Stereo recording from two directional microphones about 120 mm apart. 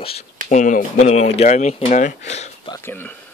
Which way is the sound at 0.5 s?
90° left.